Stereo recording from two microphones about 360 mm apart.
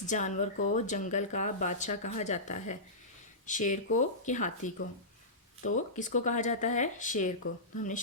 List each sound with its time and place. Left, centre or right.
0.0 s speech: centre